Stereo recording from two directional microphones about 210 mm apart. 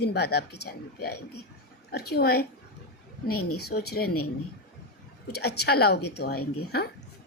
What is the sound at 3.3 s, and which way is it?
Speech, 90° left.